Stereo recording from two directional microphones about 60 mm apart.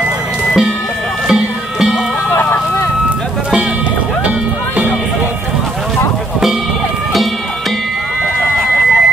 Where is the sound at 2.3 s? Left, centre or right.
Left.